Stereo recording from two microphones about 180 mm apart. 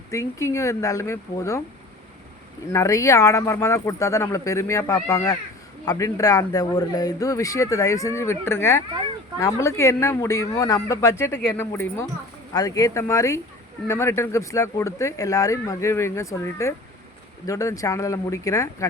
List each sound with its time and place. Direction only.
0.1 s speech: 15° left (ahead or behind)
2.6 s speech: 15° left (ahead or behind)